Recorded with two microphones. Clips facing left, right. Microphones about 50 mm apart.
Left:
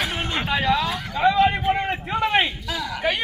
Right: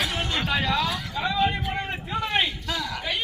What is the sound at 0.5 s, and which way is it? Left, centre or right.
Speech, centre.